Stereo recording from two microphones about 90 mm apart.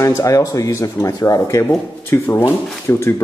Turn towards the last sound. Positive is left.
turn(degrees=30)  # may be behind; listen again after turning